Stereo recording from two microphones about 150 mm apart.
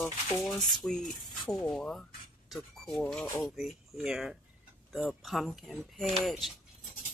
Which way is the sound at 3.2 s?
15° left (ahead or behind).